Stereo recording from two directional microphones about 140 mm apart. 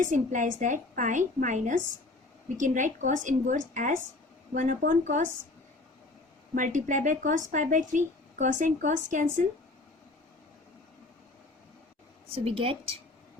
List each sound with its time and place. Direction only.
0.0 s speech: 65° right (ahead or behind)
6.5 s speech: 70° right (ahead or behind)
12.3 s speech: 40° right (ahead or behind)